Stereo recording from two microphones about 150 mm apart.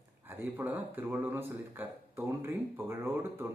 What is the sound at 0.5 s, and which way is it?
Speech, 10° right (ahead or behind).